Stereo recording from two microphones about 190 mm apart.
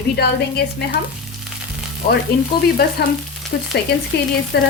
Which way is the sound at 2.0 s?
55° left (ahead or behind).